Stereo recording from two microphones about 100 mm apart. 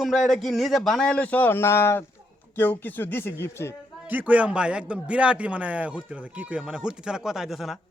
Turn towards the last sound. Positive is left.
turn(degrees=-5)  # may be behind; listen again after turning